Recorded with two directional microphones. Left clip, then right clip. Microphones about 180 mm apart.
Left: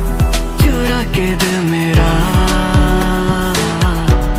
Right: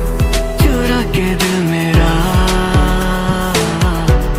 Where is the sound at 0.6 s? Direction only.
Centre (ahead or behind).